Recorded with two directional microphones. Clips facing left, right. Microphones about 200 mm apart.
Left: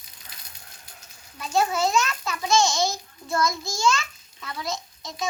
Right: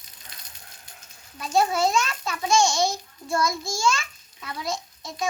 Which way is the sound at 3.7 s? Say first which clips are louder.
Left 1 dB; 25° right (ahead or behind).